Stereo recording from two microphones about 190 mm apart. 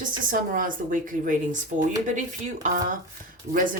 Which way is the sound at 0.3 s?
45° right (ahead or behind).